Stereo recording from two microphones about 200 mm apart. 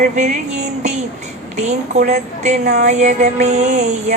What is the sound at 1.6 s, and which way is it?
A woman's voice, 35° right (ahead or behind).